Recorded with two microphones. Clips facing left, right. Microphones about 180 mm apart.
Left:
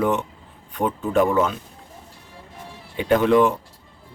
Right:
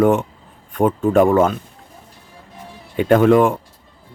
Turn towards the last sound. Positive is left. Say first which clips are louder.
# right 4 dB
turn(degrees=-50)  # may be behind; listen again after turning